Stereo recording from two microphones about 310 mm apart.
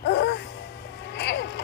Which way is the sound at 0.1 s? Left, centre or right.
Left.